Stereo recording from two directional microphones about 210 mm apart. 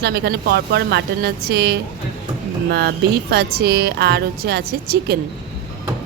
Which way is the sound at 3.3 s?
50° right (ahead or behind).